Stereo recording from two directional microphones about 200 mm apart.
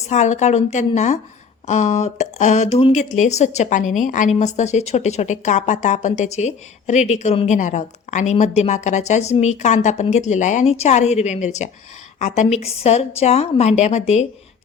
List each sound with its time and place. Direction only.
0.1 s speech: 35° left (ahead or behind)